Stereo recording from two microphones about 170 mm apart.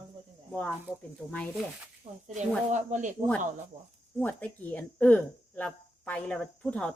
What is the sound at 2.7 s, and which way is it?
Speech, 45° right (ahead or behind).